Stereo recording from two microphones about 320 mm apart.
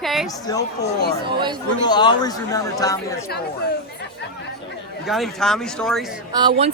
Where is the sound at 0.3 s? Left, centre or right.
Centre.